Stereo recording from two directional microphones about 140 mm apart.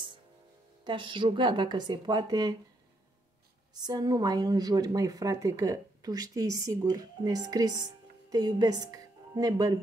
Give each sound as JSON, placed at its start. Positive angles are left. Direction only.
{"t": 0.8, "sound": "a woman's voice", "side_deg": -35}
{"t": 3.7, "sound": "speech", "side_deg": -30}